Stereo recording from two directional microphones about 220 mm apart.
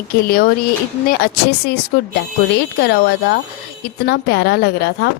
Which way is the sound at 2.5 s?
50° left (ahead or behind).